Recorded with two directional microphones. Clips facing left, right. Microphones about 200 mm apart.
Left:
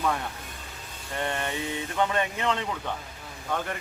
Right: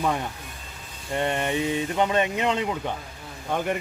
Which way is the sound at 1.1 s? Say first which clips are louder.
Right 6 dB; 20° right (ahead or behind).